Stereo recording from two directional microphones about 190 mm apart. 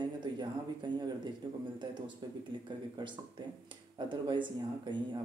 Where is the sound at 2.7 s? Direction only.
25° right (ahead or behind).